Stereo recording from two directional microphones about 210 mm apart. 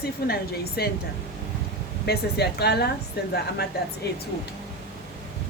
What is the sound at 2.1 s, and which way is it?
Speech, 50° left (ahead or behind).